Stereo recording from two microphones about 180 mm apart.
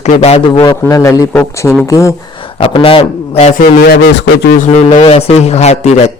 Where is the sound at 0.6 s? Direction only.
20° left (ahead or behind).